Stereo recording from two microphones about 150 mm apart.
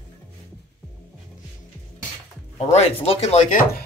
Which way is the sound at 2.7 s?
40° left (ahead or behind).